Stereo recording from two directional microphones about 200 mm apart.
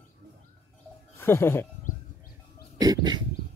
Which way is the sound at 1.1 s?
10° left (ahead or behind).